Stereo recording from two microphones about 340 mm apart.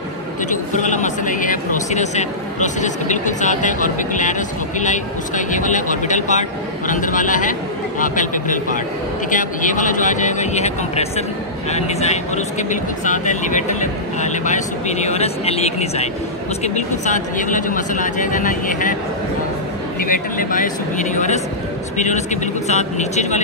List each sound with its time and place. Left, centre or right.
0.5 s speech: left
20.0 s speech: left